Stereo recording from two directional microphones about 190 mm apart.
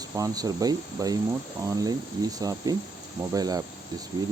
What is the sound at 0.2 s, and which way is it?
Speech, 20° right (ahead or behind).